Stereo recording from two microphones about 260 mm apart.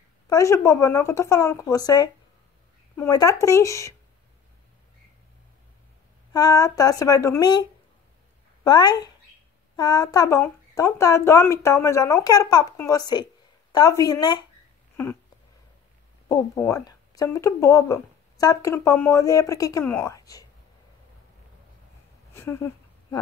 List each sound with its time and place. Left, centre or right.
0.3 s speech: centre
6.3 s speech: centre
8.6 s speech: centre
16.3 s speech: centre
22.3 s speech: centre